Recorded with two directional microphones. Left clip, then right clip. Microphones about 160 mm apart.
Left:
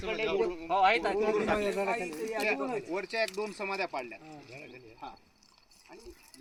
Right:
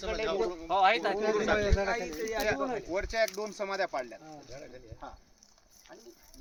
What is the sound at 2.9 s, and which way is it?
Speech, 10° right (ahead or behind).